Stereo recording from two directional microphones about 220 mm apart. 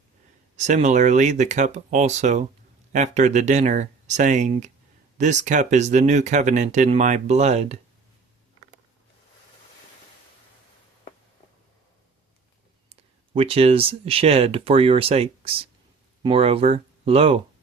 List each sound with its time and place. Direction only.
0.5 s speech: 30° right (ahead or behind)
12.9 s speech: 25° right (ahead or behind)